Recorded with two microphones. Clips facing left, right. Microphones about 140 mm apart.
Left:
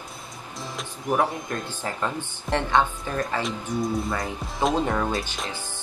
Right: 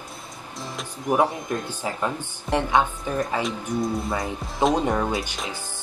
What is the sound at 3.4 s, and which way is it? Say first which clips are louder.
Speech: right 1 dB; centre (ahead or behind).